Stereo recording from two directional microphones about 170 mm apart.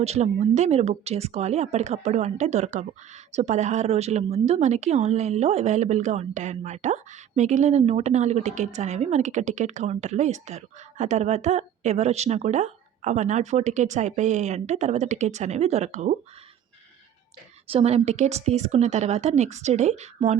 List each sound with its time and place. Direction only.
0.0 s a woman's voice: 40° right (ahead or behind)
17.7 s speech: 35° right (ahead or behind)